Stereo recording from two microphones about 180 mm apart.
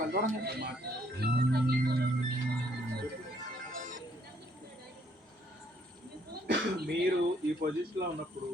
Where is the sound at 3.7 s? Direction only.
50° right (ahead or behind).